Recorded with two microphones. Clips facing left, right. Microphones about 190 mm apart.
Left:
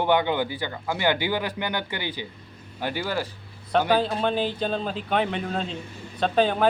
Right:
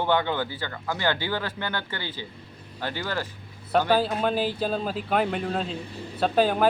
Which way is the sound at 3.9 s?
5° right (ahead or behind).